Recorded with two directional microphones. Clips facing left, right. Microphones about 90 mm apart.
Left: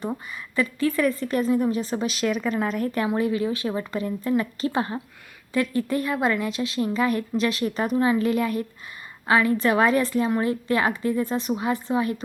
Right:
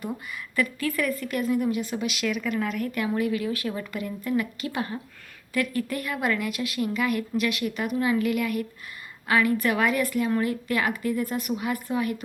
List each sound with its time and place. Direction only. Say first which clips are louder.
0.0 s a woman's voice: left 3 dB; 25° left (ahead or behind)